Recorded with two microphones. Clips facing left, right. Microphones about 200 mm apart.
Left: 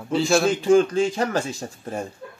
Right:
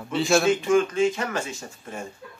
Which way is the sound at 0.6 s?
35° left (ahead or behind).